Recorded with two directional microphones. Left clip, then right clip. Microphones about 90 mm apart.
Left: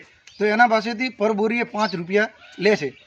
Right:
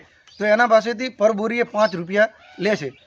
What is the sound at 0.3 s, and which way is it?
A man's voice, 40° right (ahead or behind).